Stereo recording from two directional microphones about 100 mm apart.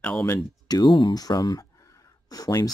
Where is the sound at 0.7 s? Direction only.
40° left (ahead or behind).